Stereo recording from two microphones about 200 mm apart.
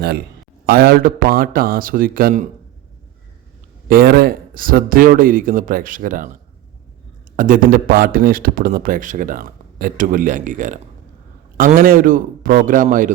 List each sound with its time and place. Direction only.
0.6 s a man's voice: 50° right (ahead or behind)
3.8 s a man's voice: 50° right (ahead or behind)
7.3 s a man's voice: 45° right (ahead or behind)